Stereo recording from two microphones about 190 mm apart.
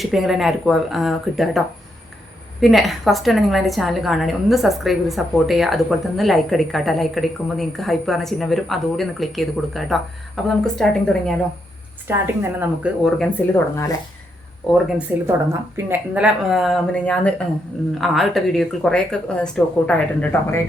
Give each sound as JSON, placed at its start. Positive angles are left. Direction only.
{"t": 0.0, "sound": "a woman's voice", "side_deg": 0}
{"t": 12.0, "sound": "a woman's voice", "side_deg": -10}
{"t": 13.1, "sound": "a woman's voice", "side_deg": 5}
{"t": 13.5, "sound": "speech", "side_deg": 15}
{"t": 14.7, "sound": "a woman's voice", "side_deg": 0}